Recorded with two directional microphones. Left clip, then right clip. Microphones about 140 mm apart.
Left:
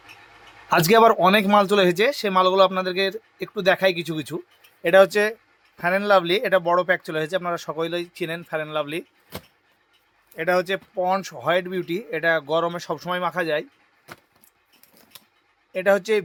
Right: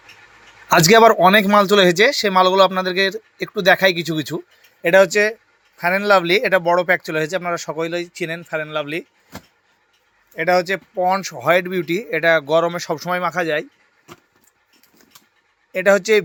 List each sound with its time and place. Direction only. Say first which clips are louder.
0.7 s speech: right 5 dB; 15° right (ahead or behind)
5.8 s speech: right 3 dB; 15° right (ahead or behind)
10.3 s speech: right 5 dB; 10° right (ahead or behind)
15.7 s speech: right 5 dB; 15° right (ahead or behind)